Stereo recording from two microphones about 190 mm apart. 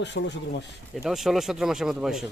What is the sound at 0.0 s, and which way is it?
Speech, 65° left (ahead or behind).